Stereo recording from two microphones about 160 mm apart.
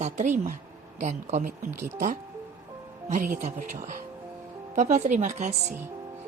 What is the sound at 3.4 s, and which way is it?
Speech, 55° right (ahead or behind).